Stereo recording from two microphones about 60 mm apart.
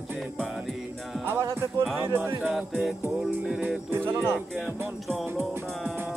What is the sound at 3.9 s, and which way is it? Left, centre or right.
Speech, right.